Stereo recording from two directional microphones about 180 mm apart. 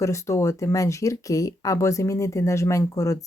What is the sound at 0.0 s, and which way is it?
Speech, 15° left (ahead or behind).